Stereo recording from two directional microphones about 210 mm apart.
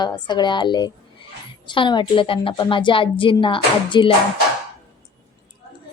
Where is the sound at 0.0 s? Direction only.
20° left (ahead or behind).